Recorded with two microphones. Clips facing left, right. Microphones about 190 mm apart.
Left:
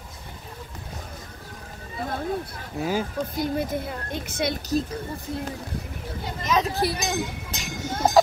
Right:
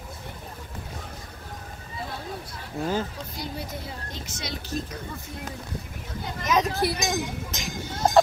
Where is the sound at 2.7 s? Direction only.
10° left (ahead or behind).